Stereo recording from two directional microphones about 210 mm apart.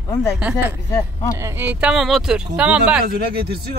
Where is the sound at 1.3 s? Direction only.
10° right (ahead or behind).